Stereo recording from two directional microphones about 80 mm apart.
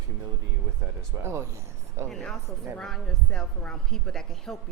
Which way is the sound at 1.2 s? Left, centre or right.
Right.